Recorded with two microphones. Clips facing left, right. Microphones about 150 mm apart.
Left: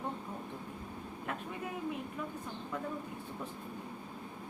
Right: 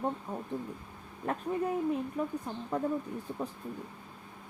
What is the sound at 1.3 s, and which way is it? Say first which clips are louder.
Speech: right 10 dB; 35° right (ahead or behind).